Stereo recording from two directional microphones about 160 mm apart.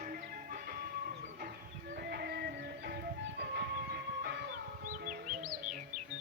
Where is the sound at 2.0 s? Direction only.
80° right.